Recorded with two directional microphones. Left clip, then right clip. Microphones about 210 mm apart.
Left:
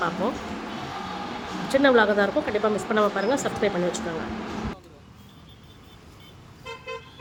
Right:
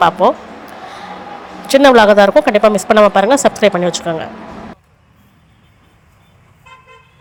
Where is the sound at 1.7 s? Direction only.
45° right (ahead or behind).